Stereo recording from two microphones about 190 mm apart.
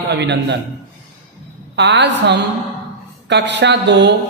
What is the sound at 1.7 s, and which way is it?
A man's voice, 65° right (ahead or behind).